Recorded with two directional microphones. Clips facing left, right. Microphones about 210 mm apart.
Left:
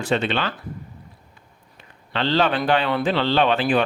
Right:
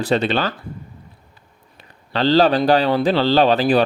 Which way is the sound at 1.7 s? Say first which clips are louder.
Right 4 dB; 35° right (ahead or behind).